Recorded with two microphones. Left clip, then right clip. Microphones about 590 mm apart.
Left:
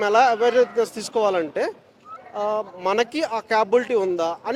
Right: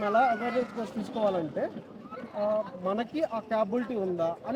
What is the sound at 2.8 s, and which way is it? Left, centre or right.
Speech, left.